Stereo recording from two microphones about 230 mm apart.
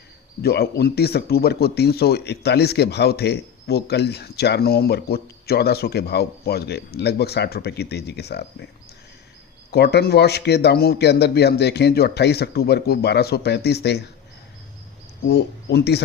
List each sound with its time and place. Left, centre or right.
0.4 s speech: left
9.7 s speech: left
15.3 s speech: left